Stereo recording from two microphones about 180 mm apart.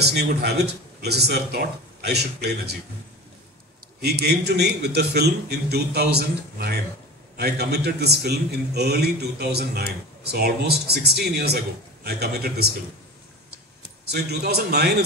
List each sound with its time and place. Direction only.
0.0 s a man's voice: 65° right (ahead or behind)
4.0 s a man's voice: 65° right (ahead or behind)
14.0 s a man's voice: 65° right (ahead or behind)